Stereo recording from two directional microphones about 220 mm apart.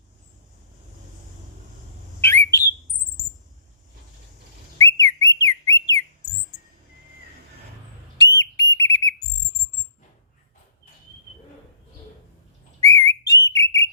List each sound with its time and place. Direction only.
2.2 s bird: 10° left (ahead or behind)
4.8 s whistle: 15° left (ahead or behind)
8.4 s whistle: 15° left (ahead or behind)
12.8 s whistle: 15° left (ahead or behind)